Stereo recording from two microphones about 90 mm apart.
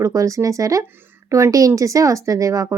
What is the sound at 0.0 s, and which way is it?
Speech, 40° right (ahead or behind).